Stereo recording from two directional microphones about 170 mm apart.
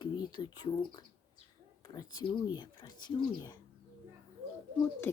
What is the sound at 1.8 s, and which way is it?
Speech, 25° left (ahead or behind).